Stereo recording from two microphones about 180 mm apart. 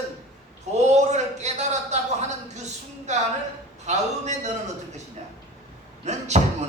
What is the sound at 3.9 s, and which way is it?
Speech, 40° right (ahead or behind).